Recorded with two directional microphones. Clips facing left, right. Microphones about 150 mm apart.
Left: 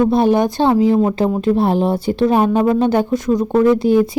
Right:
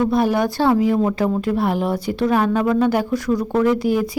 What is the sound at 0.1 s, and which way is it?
Speech, 25° left (ahead or behind).